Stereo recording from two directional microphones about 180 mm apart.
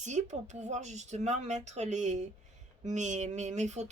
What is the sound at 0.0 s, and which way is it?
Speech, 40° right (ahead or behind).